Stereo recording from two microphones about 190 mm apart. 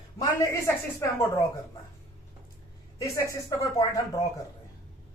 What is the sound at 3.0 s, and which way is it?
A woman's voice, 15° left (ahead or behind).